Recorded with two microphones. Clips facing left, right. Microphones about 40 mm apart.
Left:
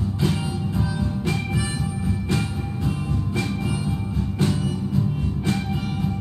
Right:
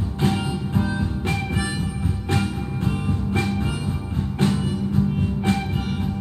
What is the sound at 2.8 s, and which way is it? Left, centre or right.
Music, right.